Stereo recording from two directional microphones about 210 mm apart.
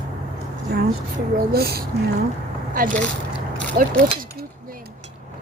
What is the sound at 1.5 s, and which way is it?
Speech, 50° right (ahead or behind).